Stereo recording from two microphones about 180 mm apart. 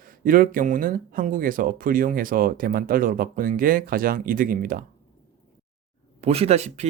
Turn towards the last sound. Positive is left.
turn(degrees=-35)  # may be behind; listen again after turning